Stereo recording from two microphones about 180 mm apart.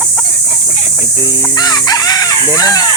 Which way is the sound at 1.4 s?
20° left (ahead or behind).